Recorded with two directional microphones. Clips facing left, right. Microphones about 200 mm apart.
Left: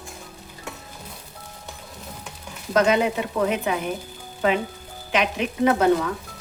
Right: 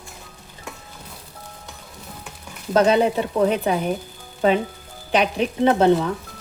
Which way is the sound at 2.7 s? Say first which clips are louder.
Right 3 dB; 30° right (ahead or behind).